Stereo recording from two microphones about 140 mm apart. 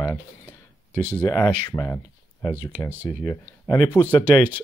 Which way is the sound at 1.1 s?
15° left (ahead or behind).